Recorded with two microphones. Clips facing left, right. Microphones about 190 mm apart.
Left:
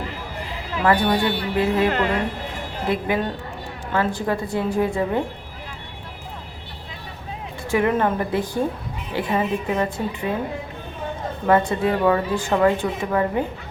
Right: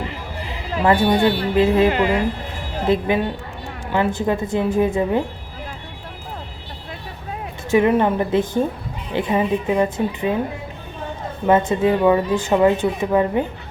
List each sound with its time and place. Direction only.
0.8 s a woman's voice: 20° right (ahead or behind)
1.9 s speech: 5° right (ahead or behind)
2.8 s a woman's voice: 25° right (ahead or behind)
7.7 s a woman's voice: 20° right (ahead or behind)
11.4 s a woman's voice: 20° right (ahead or behind)